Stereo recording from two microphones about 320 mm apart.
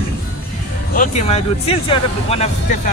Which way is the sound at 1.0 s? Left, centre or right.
Left.